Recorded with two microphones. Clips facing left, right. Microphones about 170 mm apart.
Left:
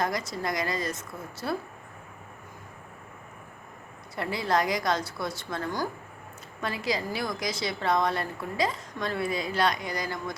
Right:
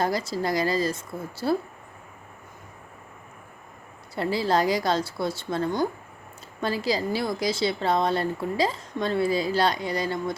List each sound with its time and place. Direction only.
0.0 s a woman's voice: 30° right (ahead or behind)
4.1 s a woman's voice: 30° right (ahead or behind)